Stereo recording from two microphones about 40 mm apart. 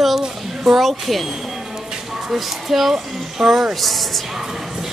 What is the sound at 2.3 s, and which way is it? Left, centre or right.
A woman's voice, centre.